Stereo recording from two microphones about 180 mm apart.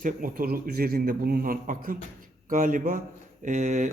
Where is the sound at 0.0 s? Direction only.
50° right (ahead or behind).